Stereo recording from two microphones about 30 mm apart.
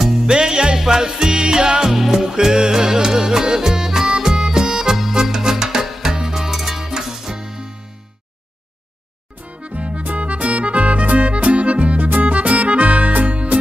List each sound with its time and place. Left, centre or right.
0.0 s music: centre
0.3 s music: right
1.9 s music: centre
2.3 s music: right
5.9 s music: centre
6.1 s music: centre
6.5 s music: centre
9.4 s music: right